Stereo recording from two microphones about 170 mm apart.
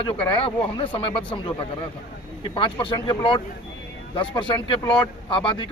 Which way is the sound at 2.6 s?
30° left (ahead or behind).